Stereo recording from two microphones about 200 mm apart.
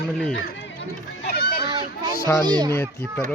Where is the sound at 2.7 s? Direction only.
10° left (ahead or behind).